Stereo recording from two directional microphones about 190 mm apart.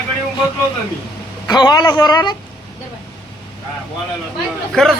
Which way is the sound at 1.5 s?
20° left (ahead or behind).